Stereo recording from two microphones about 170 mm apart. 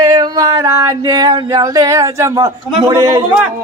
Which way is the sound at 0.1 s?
25° right (ahead or behind).